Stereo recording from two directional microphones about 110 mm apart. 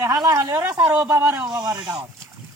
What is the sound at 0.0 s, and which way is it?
Speech, 35° right (ahead or behind).